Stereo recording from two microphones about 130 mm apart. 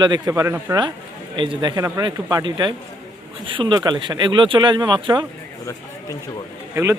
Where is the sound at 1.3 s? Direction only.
40° right (ahead or behind).